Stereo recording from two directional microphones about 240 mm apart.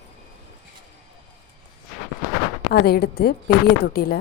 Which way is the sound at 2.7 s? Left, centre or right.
Left.